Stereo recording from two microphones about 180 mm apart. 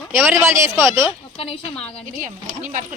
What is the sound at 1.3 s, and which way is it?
Speech, 35° left (ahead or behind).